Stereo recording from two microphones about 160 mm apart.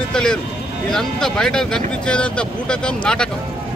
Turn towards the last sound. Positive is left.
turn(degrees=5)  # may be behind; listen again after turning